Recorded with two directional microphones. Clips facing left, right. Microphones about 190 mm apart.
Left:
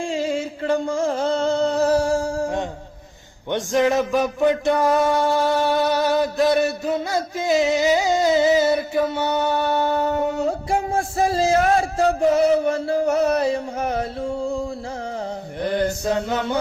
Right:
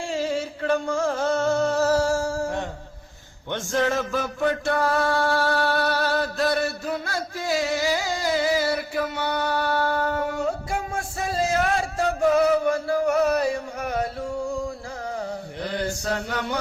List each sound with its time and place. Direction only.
0.1 s music: 15° left (ahead or behind)
16.0 s mantra: 20° left (ahead or behind)